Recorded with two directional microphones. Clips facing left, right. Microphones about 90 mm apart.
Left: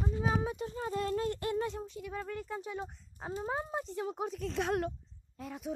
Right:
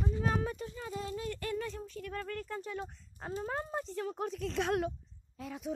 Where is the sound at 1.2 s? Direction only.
30° left (ahead or behind).